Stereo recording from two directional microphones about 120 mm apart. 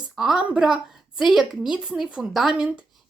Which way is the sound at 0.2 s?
5° right (ahead or behind).